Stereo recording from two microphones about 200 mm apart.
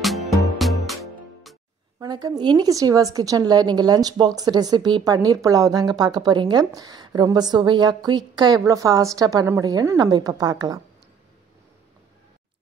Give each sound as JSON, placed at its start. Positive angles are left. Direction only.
{"t": 0.0, "sound": "music", "side_deg": 0}
{"t": 2.0, "sound": "a woman's voice", "side_deg": -20}